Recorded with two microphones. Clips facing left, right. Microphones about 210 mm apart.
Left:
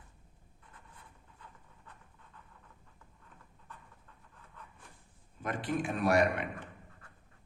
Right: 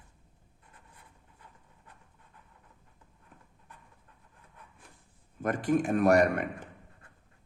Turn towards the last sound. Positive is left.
turn(degrees=-45)  # may be behind; listen again after turning